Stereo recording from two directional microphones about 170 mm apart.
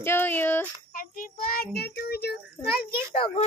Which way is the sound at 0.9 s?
55° left (ahead or behind).